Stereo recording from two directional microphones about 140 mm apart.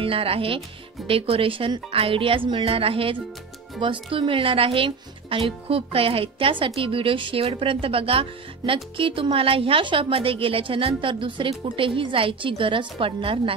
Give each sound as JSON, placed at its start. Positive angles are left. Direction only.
{"t": 0.0, "sound": "speech", "side_deg": -40}